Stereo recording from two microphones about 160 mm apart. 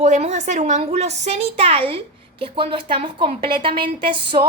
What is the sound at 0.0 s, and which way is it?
A woman's voice, 50° right (ahead or behind).